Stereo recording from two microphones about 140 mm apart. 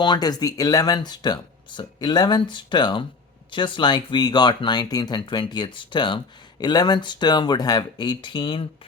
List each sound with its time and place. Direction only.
0.0 s speech: 30° left (ahead or behind)